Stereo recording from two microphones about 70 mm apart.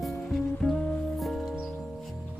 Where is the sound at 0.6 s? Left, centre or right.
Centre.